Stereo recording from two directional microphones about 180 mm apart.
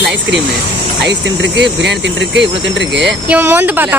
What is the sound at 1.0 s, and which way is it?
Speech, 75° right (ahead or behind).